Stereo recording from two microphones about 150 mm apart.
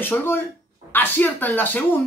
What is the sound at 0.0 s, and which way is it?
Speech, 15° left (ahead or behind).